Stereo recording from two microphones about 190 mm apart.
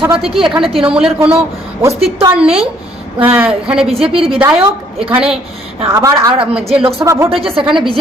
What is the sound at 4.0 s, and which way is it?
Speech, 30° right (ahead or behind).